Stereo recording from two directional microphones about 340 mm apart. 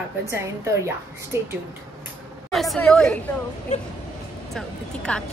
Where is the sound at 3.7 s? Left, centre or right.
Left.